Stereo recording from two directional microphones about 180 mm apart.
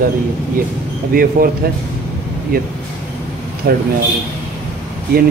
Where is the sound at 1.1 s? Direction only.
55° right (ahead or behind).